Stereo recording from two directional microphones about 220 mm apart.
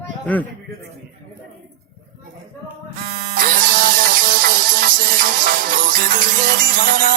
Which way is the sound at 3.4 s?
40° right (ahead or behind).